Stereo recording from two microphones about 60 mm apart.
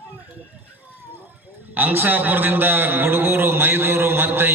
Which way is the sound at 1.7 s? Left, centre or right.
Right.